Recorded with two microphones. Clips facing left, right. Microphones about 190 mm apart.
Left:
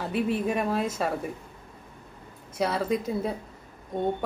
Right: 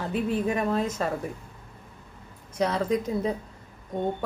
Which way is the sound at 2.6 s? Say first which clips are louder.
Right 1 dB; 5° left (ahead or behind).